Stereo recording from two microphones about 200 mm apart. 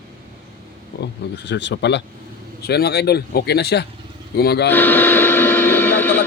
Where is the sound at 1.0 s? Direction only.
60° left (ahead or behind).